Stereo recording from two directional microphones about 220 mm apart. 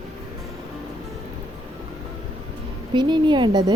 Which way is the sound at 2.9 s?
20° right (ahead or behind).